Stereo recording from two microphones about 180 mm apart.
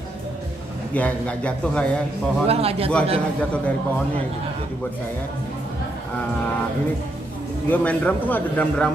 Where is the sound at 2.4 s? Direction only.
35° right (ahead or behind).